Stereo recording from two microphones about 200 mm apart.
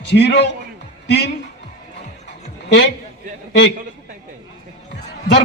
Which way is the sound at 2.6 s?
60° left (ahead or behind).